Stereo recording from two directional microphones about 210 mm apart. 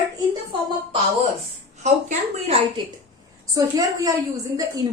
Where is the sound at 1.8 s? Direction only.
30° right (ahead or behind).